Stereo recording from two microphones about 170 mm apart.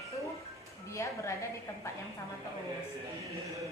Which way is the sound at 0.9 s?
15° left (ahead or behind).